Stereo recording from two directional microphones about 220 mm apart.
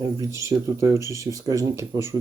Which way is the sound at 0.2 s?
15° right (ahead or behind).